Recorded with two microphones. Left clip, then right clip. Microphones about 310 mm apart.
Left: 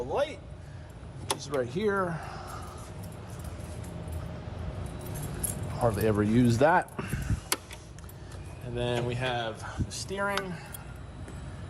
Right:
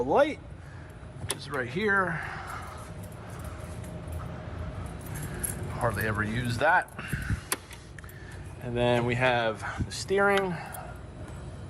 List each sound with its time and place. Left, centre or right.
0.0 s a man's voice: centre
1.4 s speech: centre
5.7 s speech: left
8.7 s speech: centre